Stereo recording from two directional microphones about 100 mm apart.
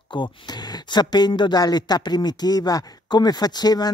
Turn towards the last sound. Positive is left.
turn(degrees=40)  # may be behind; listen again after turning